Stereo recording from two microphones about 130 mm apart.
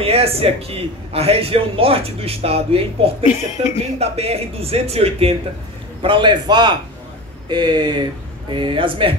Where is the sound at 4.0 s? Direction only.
50° right (ahead or behind).